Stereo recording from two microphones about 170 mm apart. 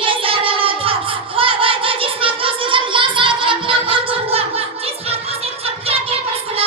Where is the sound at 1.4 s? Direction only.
30° right (ahead or behind).